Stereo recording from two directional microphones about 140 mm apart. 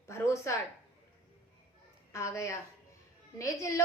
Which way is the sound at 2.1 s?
20° left (ahead or behind).